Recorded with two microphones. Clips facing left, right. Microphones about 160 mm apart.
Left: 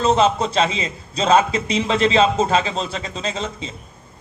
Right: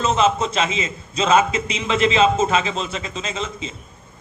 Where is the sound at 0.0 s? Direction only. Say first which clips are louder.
Left 2 dB; 35° left (ahead or behind).